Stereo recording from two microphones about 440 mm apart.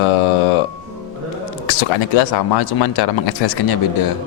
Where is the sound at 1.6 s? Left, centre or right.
Left.